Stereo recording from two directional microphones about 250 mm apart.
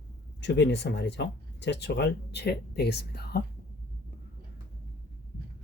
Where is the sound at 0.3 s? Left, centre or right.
Left.